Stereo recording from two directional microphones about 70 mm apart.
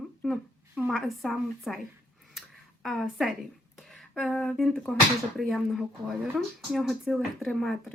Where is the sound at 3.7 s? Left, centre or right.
Centre.